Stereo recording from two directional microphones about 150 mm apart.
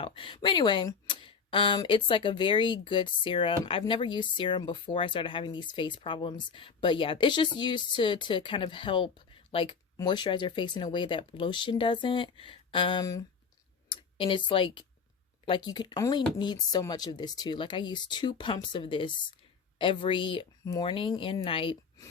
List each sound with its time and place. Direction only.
0.0 s speech: 35° left (ahead or behind)